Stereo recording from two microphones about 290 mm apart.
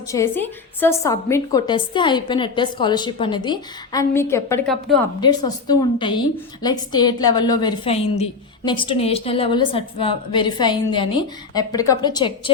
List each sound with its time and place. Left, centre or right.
0.1 s a woman's voice: centre